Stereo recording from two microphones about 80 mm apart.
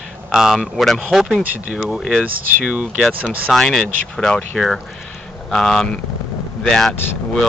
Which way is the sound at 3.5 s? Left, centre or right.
Centre.